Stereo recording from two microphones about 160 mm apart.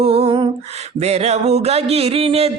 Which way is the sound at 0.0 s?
35° right (ahead or behind).